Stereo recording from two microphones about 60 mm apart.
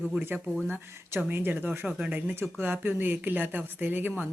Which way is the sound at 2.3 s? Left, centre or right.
Right.